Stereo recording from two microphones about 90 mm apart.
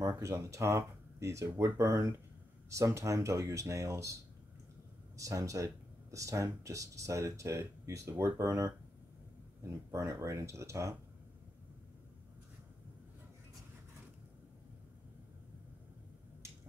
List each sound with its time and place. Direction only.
0.2 s speech: 35° right (ahead or behind)
9.6 s speech: 30° right (ahead or behind)